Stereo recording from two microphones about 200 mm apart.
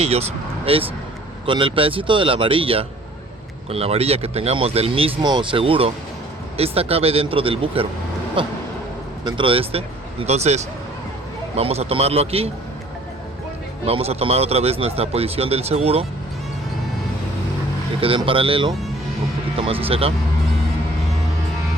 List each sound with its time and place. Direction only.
0.0 s speech: 30° right (ahead or behind)
13.8 s speech: 30° right (ahead or behind)
18.0 s speech: 25° right (ahead or behind)